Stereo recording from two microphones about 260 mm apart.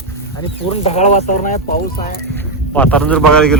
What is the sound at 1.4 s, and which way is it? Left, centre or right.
Speech, left.